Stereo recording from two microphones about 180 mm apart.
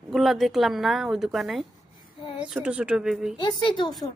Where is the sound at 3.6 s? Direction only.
25° left (ahead or behind).